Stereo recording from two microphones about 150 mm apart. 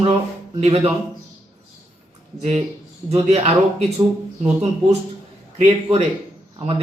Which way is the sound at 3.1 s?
45° right (ahead or behind).